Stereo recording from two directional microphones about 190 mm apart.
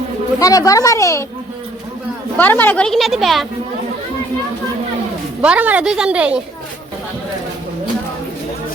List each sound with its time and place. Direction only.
0.3 s speech: 20° left (ahead or behind)
2.4 s a woman's voice: 10° left (ahead or behind)
5.4 s a woman's voice: 5° right (ahead or behind)